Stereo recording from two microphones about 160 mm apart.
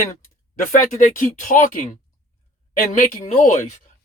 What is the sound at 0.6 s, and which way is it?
Speech, 55° left (ahead or behind).